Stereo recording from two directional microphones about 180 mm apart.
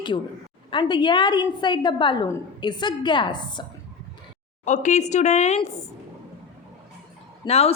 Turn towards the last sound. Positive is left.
turn(degrees=35)  # may be behind; listen again after turning